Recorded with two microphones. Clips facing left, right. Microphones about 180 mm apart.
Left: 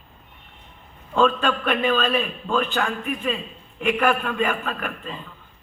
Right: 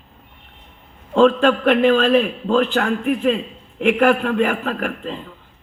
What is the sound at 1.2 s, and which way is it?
A man's voice, 75° right (ahead or behind).